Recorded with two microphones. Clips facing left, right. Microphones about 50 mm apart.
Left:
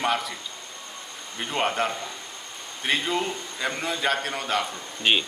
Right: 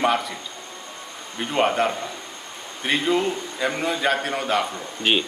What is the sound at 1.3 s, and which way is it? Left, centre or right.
A man's voice, centre.